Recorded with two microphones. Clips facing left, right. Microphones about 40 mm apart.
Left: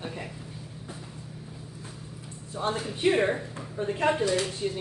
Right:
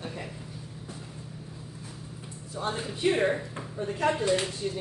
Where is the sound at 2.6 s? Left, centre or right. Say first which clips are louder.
Left 2 dB; left.